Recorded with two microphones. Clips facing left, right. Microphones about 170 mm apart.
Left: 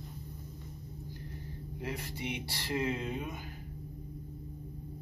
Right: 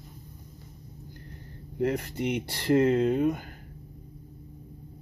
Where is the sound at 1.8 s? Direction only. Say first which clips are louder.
Right 12 dB; 60° right (ahead or behind).